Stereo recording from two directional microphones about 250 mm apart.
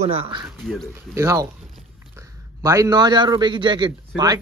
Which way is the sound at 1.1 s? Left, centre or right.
Centre.